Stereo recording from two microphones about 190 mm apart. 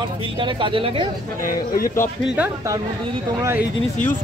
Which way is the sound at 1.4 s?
50° left (ahead or behind).